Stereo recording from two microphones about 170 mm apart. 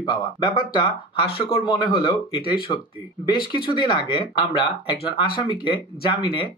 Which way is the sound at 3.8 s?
25° left (ahead or behind).